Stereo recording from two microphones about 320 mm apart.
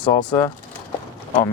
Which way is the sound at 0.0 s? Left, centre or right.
Centre.